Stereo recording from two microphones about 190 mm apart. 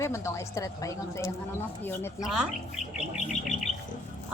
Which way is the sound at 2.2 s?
5° right (ahead or behind).